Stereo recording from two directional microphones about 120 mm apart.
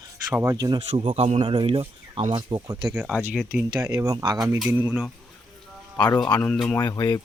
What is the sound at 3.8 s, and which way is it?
Speech, 25° right (ahead or behind).